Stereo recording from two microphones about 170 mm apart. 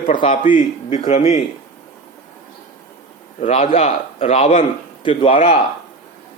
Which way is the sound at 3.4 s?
35° left (ahead or behind).